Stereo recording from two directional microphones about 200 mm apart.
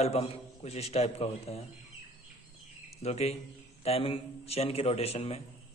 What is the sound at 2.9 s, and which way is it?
A man's voice, 30° left (ahead or behind).